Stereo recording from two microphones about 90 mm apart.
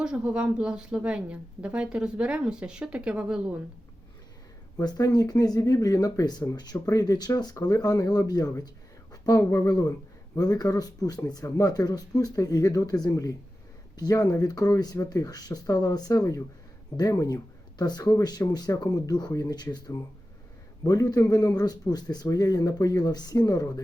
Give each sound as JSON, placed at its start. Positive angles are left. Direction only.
{"t": 0.0, "sound": "a woman's voice", "side_deg": -10}
{"t": 4.8, "sound": "a man's voice", "side_deg": 45}
{"t": 20.8, "sound": "a man's voice", "side_deg": 45}